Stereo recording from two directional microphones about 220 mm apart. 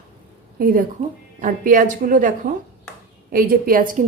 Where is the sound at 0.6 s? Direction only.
40° right (ahead or behind).